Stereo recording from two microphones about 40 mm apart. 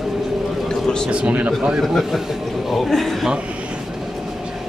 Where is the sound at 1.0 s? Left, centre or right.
Right.